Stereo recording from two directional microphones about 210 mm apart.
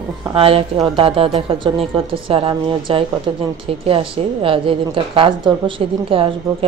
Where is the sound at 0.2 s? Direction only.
25° right (ahead or behind).